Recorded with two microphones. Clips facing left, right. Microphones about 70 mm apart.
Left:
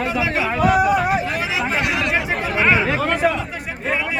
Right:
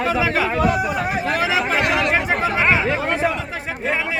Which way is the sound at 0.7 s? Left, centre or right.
Left.